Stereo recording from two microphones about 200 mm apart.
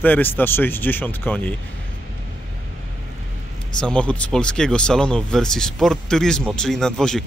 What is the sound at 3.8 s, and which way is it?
Speech, 5° left (ahead or behind).